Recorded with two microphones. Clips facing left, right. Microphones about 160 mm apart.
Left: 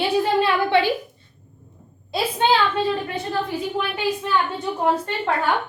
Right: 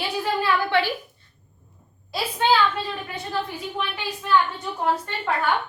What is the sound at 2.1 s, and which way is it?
A woman's voice, 25° left (ahead or behind).